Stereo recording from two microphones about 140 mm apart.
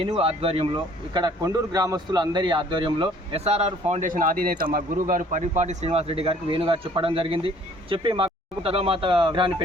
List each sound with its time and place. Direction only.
0.2 s speech: 45° right (ahead or behind)
1.1 s a man's voice: 30° right (ahead or behind); by 4.0 s 50° right (ahead or behind)
4.0 s a man's voice: 75° right (ahead or behind); by 9.6 s 35° right (ahead or behind)